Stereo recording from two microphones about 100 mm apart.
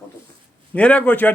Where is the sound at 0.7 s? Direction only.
10° left (ahead or behind).